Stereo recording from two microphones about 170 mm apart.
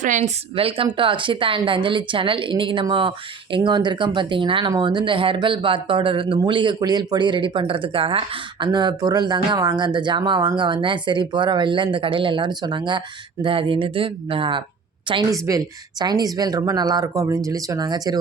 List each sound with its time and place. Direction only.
0.0 s a woman's voice: 45° right (ahead or behind)
0.5 s a woman's voice: 30° right (ahead or behind)
15.1 s a woman's voice: 20° right (ahead or behind)